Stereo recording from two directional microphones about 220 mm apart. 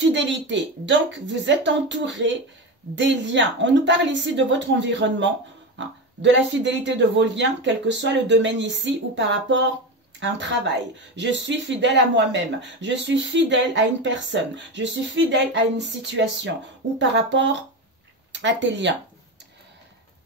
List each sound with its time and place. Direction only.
0.0 s speech: 55° right (ahead or behind)
11.1 s speech: 55° right (ahead or behind)